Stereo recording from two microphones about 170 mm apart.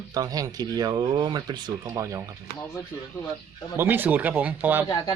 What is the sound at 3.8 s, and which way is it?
Speech, 10° right (ahead or behind).